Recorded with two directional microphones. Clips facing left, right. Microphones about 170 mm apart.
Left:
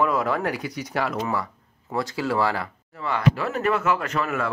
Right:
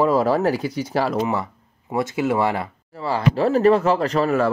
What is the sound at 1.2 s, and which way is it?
Speech, 20° right (ahead or behind).